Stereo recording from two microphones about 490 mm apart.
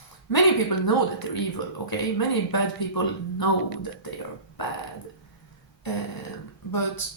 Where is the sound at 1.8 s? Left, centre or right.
Left.